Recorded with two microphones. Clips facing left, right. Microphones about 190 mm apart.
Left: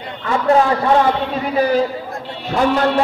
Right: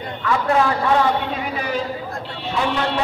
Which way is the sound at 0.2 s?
30° left (ahead or behind).